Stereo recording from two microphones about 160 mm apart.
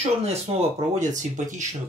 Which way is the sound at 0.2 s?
40° right (ahead or behind).